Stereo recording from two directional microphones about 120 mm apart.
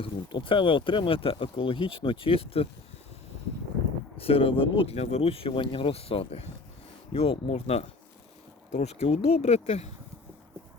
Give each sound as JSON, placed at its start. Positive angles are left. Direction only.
{"t": 0.0, "sound": "speech", "side_deg": 45}
{"t": 4.2, "sound": "speech", "side_deg": 50}